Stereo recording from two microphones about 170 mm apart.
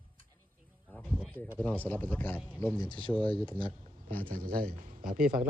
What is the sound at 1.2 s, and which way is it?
Speech, 10° left (ahead or behind).